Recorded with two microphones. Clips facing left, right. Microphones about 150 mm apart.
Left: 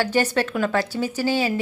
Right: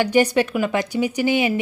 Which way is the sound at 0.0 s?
15° right (ahead or behind).